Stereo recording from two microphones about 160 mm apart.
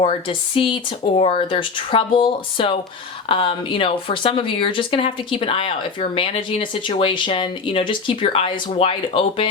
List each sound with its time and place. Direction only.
0.0 s a woman's voice: 35° left (ahead or behind)